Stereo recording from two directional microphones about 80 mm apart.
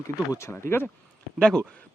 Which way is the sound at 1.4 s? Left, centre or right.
Centre.